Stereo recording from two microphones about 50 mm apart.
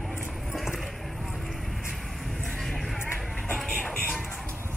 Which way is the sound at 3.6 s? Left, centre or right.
Centre.